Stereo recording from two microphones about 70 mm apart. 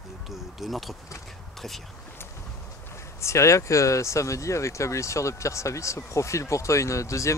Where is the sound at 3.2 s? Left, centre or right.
Left.